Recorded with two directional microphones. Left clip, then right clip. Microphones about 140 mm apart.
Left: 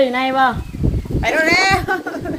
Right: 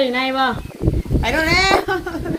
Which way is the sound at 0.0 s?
20° left (ahead or behind).